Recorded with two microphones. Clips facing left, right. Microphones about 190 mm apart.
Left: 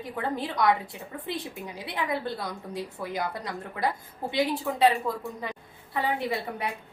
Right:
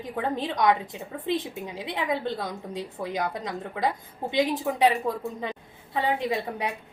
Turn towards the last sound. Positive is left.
turn(degrees=-20)  # may be behind; listen again after turning